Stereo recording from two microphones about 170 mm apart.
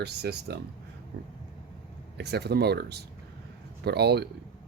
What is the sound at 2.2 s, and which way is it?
Speech, 75° right (ahead or behind).